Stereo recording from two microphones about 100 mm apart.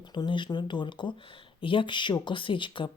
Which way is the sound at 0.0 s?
50° left (ahead or behind).